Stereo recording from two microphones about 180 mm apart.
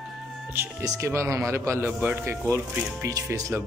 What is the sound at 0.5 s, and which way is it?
Speech, 10° right (ahead or behind).